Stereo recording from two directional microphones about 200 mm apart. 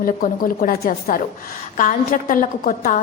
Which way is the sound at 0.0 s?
45° left (ahead or behind).